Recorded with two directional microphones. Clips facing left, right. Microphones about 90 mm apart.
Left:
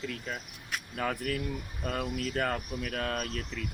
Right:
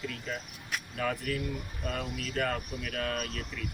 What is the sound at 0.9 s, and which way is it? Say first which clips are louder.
Speech: even; 45° left (ahead or behind).